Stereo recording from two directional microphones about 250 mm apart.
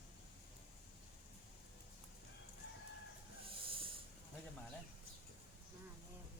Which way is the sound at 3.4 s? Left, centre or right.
Right.